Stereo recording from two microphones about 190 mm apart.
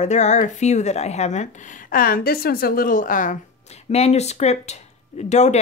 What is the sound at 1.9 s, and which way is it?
Speech, 50° left (ahead or behind).